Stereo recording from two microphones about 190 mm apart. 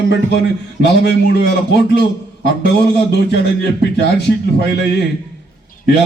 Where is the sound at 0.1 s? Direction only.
60° left (ahead or behind).